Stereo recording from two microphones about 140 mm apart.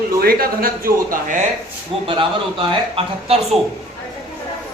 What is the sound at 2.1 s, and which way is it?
Speech, 35° right (ahead or behind).